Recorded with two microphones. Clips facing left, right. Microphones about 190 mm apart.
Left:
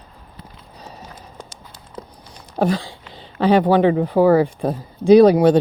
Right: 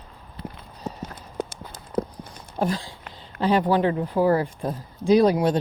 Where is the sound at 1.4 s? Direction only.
60° right (ahead or behind).